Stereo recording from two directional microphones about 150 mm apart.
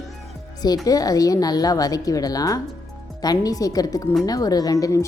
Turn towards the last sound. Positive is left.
turn(degrees=25)  # may be behind; listen again after turning